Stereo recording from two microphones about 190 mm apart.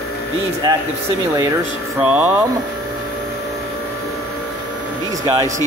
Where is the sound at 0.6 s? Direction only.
20° right (ahead or behind).